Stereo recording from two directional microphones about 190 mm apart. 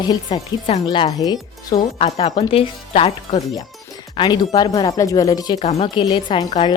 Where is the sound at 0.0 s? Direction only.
20° left (ahead or behind).